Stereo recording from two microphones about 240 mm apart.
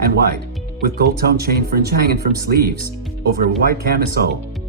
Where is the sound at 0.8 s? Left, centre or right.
Right.